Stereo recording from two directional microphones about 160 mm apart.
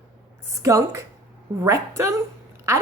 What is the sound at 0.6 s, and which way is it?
A woman's voice, 20° right (ahead or behind).